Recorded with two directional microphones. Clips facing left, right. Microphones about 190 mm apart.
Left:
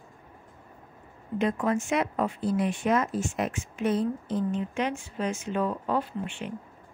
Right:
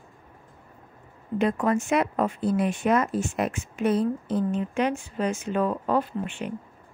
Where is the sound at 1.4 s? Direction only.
50° right (ahead or behind).